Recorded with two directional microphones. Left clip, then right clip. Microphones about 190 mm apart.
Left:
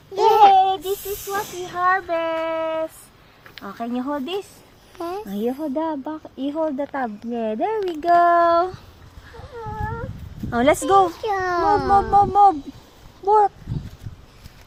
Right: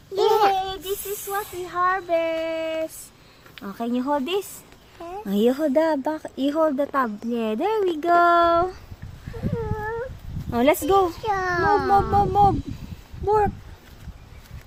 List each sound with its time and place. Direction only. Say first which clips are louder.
0.2 s a sound: left 6 dB; centre (ahead or behind)
0.5 s a child's voice: left 9 dB; 15° left (ahead or behind)
2.0 s speech: even; 20° right (ahead or behind); by 4.4 s 40° right (ahead or behind)
5.3 s speech: right 8 dB; 55° right (ahead or behind)
6.7 s a child's voice: right 3 dB; 30° right (ahead or behind); by 8.8 s 5° right (ahead or behind)
10.5 s a child's voice: left 3 dB; centre (ahead or behind)